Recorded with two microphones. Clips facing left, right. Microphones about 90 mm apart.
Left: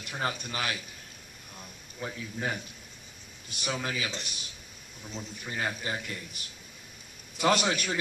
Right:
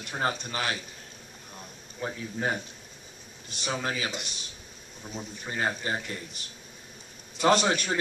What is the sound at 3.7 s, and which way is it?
Speech, 30° right (ahead or behind).